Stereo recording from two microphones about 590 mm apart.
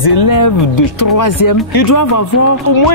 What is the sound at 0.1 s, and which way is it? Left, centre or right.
Speech, left.